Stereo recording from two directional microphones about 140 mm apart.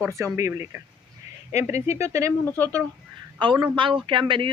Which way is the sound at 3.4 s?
35° right (ahead or behind).